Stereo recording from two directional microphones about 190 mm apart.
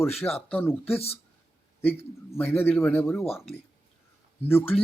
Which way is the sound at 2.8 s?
10° left (ahead or behind).